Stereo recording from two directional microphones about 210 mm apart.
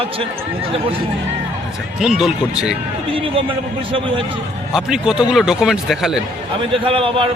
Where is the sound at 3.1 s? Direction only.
25° right (ahead or behind).